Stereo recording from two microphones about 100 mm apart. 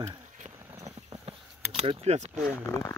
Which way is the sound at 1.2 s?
65° right (ahead or behind).